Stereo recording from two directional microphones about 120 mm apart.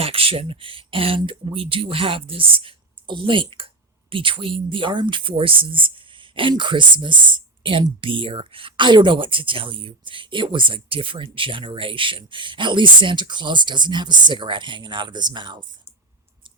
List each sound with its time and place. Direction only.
0.0 s speech: 50° right (ahead or behind)